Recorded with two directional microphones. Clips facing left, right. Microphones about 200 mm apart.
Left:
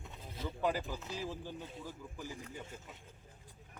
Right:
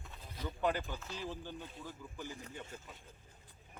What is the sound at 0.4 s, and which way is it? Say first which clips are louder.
Speech: even; 5° left (ahead or behind).